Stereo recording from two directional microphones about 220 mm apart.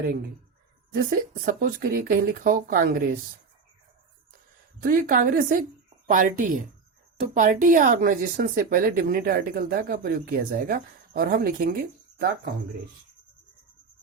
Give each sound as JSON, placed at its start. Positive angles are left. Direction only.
{"t": 1.3, "sound": "speech", "side_deg": -40}
{"t": 4.8, "sound": "speech", "side_deg": -40}